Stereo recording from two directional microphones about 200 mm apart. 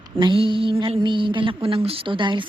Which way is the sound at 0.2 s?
25° right (ahead or behind).